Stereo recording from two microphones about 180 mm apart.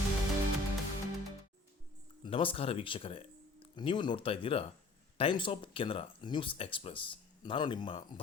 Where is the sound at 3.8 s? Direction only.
25° left (ahead or behind).